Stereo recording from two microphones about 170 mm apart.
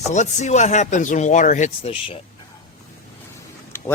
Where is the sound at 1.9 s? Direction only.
30° left (ahead or behind).